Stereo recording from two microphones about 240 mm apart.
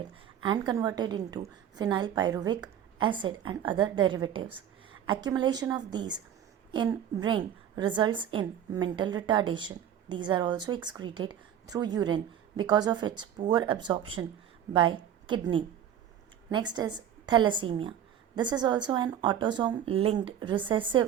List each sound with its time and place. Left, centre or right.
0.4 s a woman's voice: centre
15.3 s a woman's voice: centre